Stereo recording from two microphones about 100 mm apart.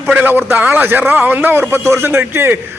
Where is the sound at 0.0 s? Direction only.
20° right (ahead or behind).